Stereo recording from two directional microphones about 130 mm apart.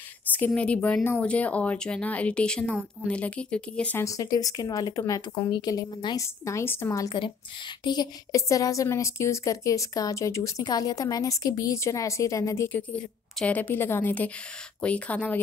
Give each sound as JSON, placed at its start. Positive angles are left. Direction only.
{"t": 0.5, "sound": "speech", "side_deg": 10}
{"t": 4.0, "sound": "a woman's voice", "side_deg": 25}